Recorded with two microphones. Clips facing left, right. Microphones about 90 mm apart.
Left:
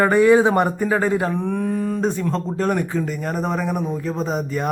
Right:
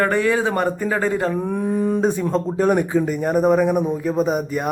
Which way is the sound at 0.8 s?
5° left (ahead or behind).